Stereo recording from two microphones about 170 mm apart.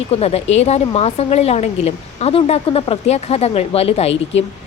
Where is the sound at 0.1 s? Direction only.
35° left (ahead or behind).